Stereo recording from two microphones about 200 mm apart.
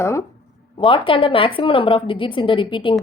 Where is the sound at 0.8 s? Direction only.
25° left (ahead or behind).